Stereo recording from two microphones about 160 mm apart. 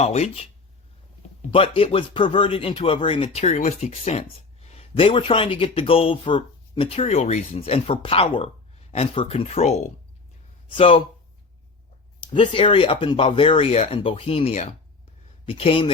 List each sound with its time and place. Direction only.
0.0 s speech: 40° left (ahead or behind)
1.5 s speech: 35° left (ahead or behind)
12.3 s speech: 30° left (ahead or behind)